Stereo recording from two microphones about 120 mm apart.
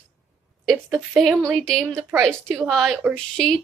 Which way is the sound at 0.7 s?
5° right (ahead or behind).